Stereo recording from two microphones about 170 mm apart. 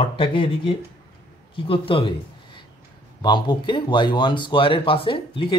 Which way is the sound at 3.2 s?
25° left (ahead or behind).